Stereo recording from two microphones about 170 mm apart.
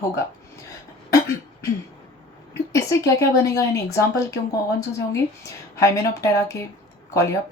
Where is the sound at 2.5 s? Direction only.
20° left (ahead or behind).